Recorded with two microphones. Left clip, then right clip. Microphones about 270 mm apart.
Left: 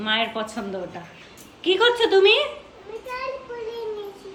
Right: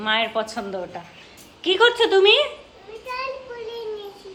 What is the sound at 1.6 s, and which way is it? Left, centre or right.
Speech, centre.